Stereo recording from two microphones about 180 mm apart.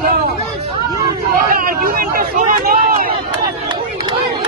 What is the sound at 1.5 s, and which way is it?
Speech, 50° right (ahead or behind).